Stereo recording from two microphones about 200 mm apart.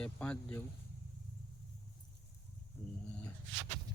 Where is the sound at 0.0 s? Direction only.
5° left (ahead or behind).